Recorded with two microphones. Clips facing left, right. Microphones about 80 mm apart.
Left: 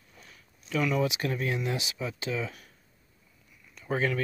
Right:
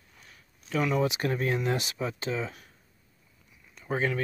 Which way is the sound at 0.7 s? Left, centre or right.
Right.